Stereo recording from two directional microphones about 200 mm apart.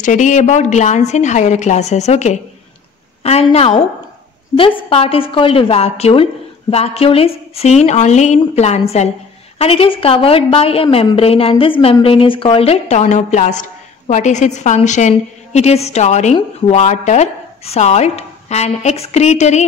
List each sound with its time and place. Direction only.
0.0 s a woman's voice: 40° left (ahead or behind)